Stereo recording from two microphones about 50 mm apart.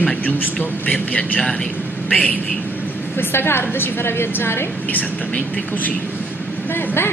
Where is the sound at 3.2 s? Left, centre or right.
Left.